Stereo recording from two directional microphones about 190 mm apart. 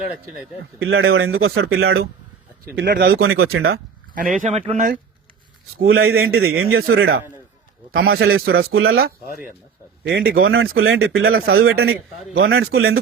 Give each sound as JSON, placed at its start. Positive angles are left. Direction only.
{"t": 0.8, "sound": "a man's voice", "side_deg": -90}
{"t": 2.7, "sound": "speech", "side_deg": -55}
{"t": 3.4, "sound": "a man's voice", "side_deg": -90}
{"t": 4.4, "sound": "speech", "side_deg": -35}
{"t": 5.8, "sound": "a man's voice", "side_deg": -90}
{"t": 10.0, "sound": "speech", "side_deg": -55}
{"t": 10.4, "sound": "a man's voice", "side_deg": -90}